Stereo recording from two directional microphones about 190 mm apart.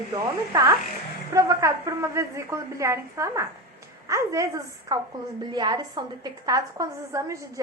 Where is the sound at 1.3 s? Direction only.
15° right (ahead or behind).